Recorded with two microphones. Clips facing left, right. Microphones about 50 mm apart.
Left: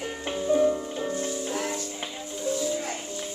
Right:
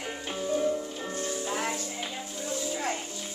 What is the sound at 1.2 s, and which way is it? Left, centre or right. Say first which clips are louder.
Music: left 1 dB; right.